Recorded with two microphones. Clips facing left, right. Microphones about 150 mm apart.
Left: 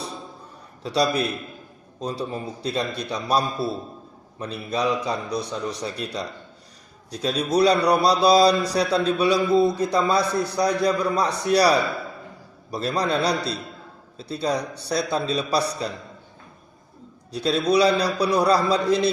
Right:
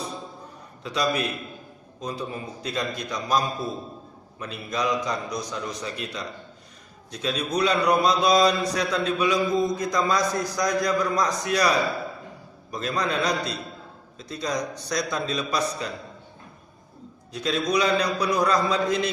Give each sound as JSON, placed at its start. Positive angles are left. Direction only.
{"t": 0.8, "sound": "a man's voice", "side_deg": 35}
{"t": 17.3, "sound": "a man's voice", "side_deg": 35}